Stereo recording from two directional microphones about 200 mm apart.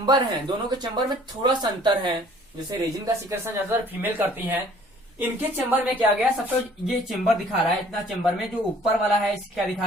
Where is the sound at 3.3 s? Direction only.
10° right (ahead or behind).